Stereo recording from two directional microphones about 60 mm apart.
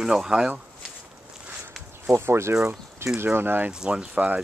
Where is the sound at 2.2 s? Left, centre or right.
Right.